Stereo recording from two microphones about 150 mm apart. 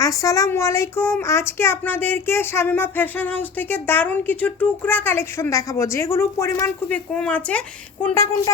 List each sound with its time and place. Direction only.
0.0 s speech: 20° left (ahead or behind)